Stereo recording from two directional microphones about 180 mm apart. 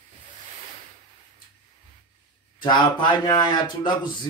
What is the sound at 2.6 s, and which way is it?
Speech, 25° left (ahead or behind).